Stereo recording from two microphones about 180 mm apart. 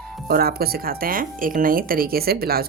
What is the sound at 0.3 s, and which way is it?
Speech, 55° right (ahead or behind).